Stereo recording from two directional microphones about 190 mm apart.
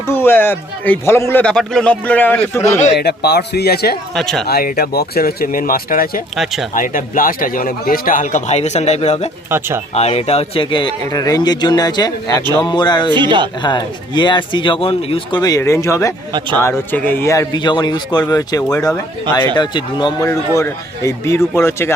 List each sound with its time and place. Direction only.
0.1 s speech: 10° left (ahead or behind)
3.0 s a man's voice: 55° left (ahead or behind)
4.1 s speech: centre (ahead or behind)
4.4 s speech: 50° left (ahead or behind)
6.3 s speech: centre (ahead or behind)
6.7 s speech: 45° left (ahead or behind)
9.5 s speech: 10° right (ahead or behind)
9.9 s speech: 35° left (ahead or behind)
13.1 s speech: 25° right (ahead or behind)
13.6 s speech: 25° left (ahead or behind)